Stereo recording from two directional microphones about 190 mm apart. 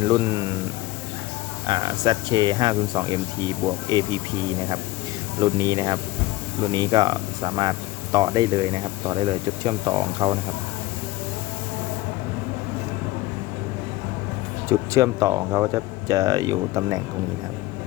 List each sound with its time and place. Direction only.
0.1 s speech: 15° right (ahead or behind)
1.6 s speech: 25° right (ahead or behind)
5.4 s speech: 20° right (ahead or behind)
14.7 s speech: 15° right (ahead or behind)